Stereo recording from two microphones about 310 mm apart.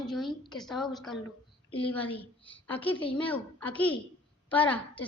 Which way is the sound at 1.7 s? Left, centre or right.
Centre.